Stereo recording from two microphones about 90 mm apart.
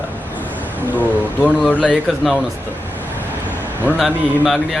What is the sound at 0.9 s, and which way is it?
Speech, 20° left (ahead or behind).